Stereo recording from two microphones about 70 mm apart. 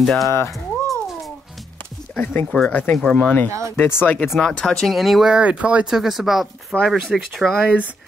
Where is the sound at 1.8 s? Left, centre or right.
Left.